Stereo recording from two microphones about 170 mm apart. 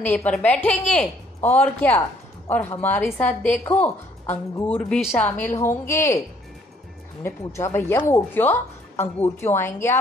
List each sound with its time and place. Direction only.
0.0 s a woman's voice: 10° left (ahead or behind)
7.2 s a woman's voice: 15° left (ahead or behind)